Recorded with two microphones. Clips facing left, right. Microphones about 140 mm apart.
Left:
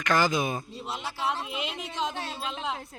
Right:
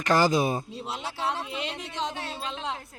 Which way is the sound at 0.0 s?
35° right (ahead or behind).